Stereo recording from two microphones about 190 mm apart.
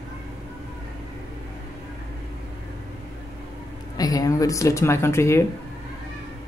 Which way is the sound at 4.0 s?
20° left (ahead or behind).